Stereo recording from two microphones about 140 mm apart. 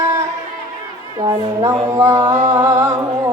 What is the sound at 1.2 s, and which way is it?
Speech, 25° right (ahead or behind).